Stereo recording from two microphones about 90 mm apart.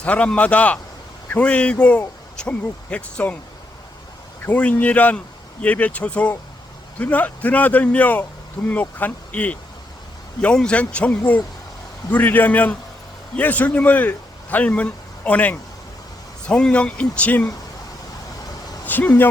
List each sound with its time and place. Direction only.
0.0 s speech: 15° left (ahead or behind)
4.4 s a man's voice: 15° left (ahead or behind)
18.9 s speech: 20° left (ahead or behind)